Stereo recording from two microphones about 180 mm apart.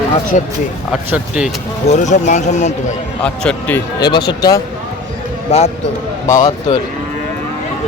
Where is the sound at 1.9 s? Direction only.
40° left (ahead or behind).